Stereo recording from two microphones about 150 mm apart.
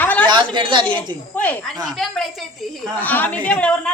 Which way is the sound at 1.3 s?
10° left (ahead or behind).